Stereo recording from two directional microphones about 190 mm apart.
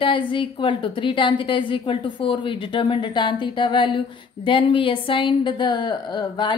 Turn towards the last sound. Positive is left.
turn(degrees=25)  # may be behind; listen again after turning